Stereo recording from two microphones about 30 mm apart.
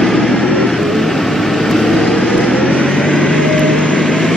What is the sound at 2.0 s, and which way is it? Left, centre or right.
Vehicle, centre.